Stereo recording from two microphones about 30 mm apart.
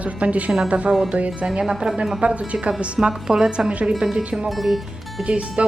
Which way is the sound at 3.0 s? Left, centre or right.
Right.